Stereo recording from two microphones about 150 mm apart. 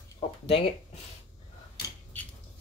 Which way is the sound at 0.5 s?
35° left (ahead or behind).